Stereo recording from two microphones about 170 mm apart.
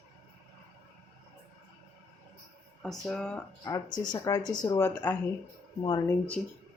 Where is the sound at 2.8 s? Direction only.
Centre (ahead or behind).